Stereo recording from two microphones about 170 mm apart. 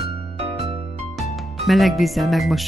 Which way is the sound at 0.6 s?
Centre (ahead or behind).